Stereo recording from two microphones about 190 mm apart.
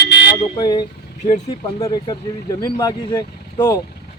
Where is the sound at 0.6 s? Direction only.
20° left (ahead or behind).